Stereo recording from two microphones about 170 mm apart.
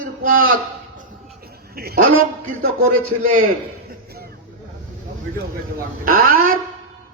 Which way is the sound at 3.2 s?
55° right (ahead or behind).